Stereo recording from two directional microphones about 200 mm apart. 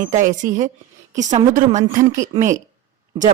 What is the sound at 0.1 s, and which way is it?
Speech, 40° right (ahead or behind).